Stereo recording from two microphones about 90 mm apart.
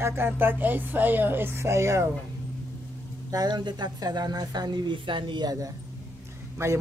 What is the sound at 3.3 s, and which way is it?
A woman's voice, 50° right (ahead or behind).